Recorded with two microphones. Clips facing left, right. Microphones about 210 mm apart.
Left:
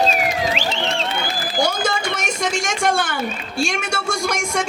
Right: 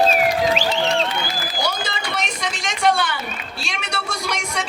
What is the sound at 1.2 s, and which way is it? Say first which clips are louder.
Speech: left 4 dB; 50° left (ahead or behind).